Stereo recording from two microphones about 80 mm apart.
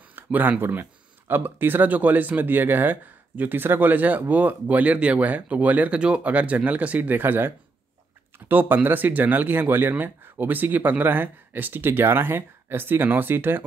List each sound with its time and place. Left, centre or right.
0.1 s speech: right